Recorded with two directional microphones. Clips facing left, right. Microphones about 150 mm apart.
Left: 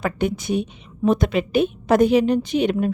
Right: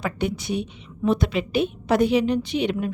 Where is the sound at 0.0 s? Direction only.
50° left (ahead or behind).